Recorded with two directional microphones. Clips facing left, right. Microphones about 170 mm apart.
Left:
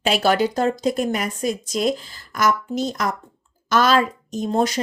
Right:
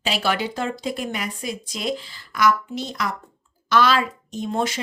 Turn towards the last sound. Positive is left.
turn(degrees=40)  # may be behind; listen again after turning